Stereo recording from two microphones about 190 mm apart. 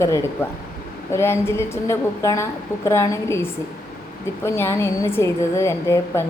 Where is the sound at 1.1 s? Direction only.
15° left (ahead or behind).